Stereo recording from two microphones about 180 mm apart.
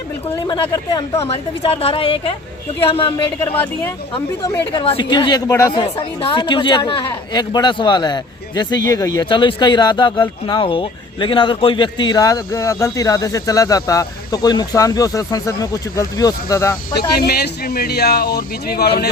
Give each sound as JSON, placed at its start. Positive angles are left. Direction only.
{"t": 0.4, "sound": "speech", "side_deg": 20}
{"t": 1.3, "sound": "a woman's voice", "side_deg": 35}
{"t": 17.2, "sound": "speech", "side_deg": 60}